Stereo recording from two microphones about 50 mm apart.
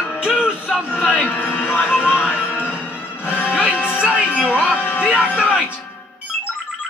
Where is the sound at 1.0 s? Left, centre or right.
Right.